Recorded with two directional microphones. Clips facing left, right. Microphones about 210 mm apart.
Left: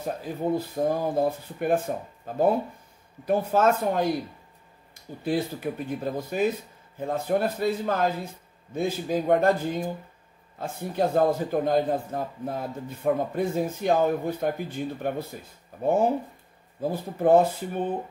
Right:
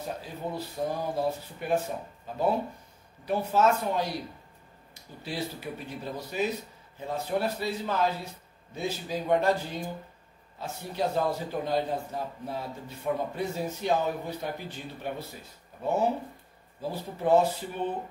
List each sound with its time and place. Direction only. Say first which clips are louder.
0.2 s speech: left 8 dB; 50° left (ahead or behind)
17.2 s speech: left 4 dB; 50° left (ahead or behind)